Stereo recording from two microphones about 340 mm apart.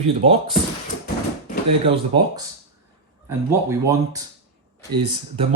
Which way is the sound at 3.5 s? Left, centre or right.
Centre.